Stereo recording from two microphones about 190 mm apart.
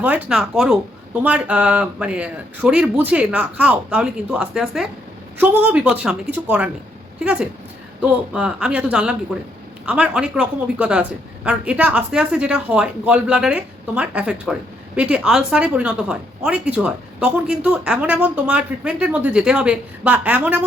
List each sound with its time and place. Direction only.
0.0 s speech: 10° right (ahead or behind)
8.0 s speech: 5° right (ahead or behind)